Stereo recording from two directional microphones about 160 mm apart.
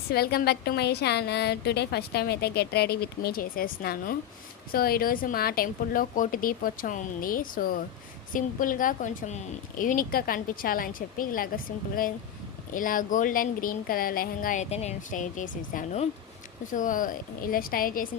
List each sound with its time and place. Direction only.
0.1 s a woman's voice: 75° left (ahead or behind)